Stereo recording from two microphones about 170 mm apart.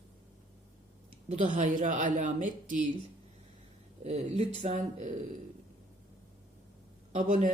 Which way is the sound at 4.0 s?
40° right (ahead or behind).